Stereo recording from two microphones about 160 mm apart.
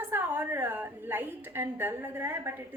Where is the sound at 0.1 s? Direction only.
15° right (ahead or behind).